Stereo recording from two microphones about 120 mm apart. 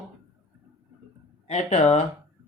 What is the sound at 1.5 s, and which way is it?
Speech, 75° left (ahead or behind).